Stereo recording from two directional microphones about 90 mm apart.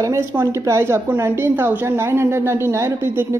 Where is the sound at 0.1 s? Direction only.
30° right (ahead or behind).